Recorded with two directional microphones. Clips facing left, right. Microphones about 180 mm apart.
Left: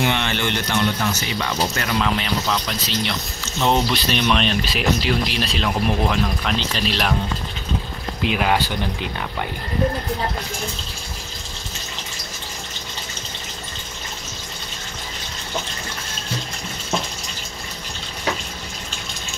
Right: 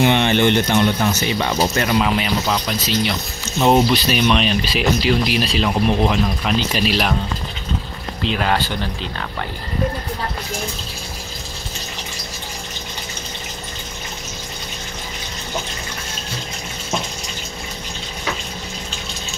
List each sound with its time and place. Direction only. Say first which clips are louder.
0.0 s speech: right 7 dB; 20° right (ahead or behind)
2.0 s speech: right 3 dB; 10° right (ahead or behind)
8.2 s speech: even; 10° left (ahead or behind)